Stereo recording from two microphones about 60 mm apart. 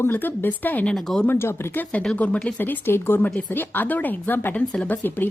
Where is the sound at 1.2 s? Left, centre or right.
Left.